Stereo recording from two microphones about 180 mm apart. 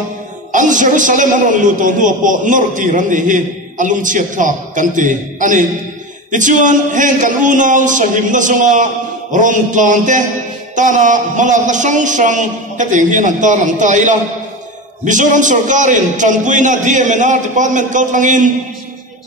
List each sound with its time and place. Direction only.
0.5 s a man's voice: 45° right (ahead or behind)